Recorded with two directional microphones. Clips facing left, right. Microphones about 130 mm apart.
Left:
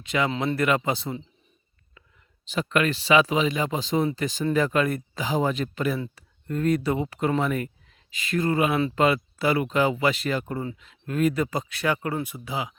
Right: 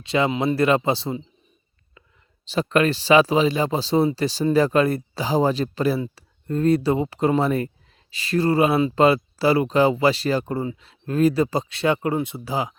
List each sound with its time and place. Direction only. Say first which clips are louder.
0.0 s speech: right 4 dB; 30° right (ahead or behind)
12.5 s speech: right 5 dB; 40° right (ahead or behind)